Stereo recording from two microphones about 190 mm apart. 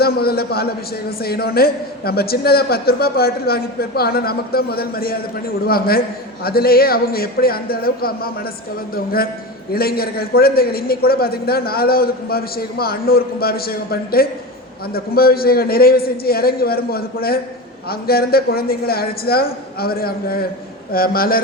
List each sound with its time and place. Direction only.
0.0 s a man's voice: 55° left (ahead or behind)
9.7 s a man's voice: 55° left (ahead or behind)